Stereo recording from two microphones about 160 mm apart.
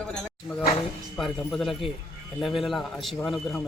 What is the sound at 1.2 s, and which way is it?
A man's voice, centre (ahead or behind).